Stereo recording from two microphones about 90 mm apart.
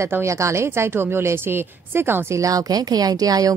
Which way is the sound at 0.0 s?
30° right (ahead or behind).